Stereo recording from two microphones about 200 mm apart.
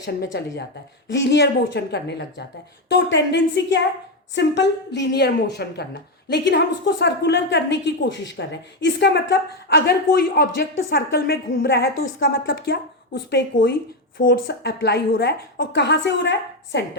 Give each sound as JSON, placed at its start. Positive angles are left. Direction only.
{"t": 0.3, "sound": "a woman's voice", "side_deg": 55}
{"t": 14.4, "sound": "a woman's voice", "side_deg": 55}